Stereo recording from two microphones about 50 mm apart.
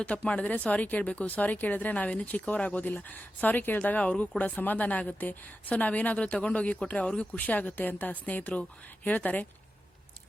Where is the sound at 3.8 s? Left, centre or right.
Left.